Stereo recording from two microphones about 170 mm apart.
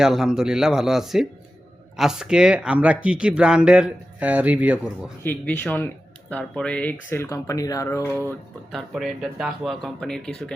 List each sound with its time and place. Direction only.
0.0 s speech: 5° right (ahead or behind)
5.2 s speech: 10° left (ahead or behind)
8.7 s speech: centre (ahead or behind)